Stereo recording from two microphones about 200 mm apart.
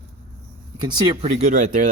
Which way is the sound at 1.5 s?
40° right (ahead or behind).